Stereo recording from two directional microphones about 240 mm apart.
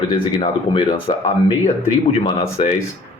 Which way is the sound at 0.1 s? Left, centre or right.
Left.